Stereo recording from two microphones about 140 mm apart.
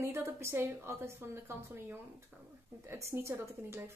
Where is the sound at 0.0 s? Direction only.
20° right (ahead or behind).